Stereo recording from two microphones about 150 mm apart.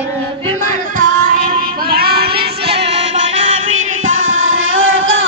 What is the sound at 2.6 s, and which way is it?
Music, 40° right (ahead or behind).